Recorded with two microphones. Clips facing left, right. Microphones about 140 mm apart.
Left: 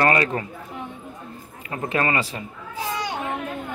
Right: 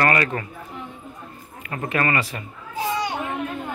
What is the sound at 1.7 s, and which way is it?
Speech, 25° left (ahead or behind).